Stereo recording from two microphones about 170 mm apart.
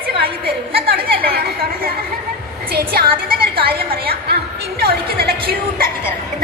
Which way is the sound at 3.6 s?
65° right (ahead or behind).